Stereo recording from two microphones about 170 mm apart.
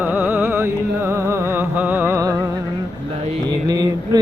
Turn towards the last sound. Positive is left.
turn(degrees=-20)  # may be behind; listen again after turning